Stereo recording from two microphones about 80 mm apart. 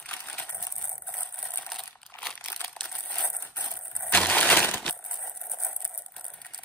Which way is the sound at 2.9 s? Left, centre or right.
Centre.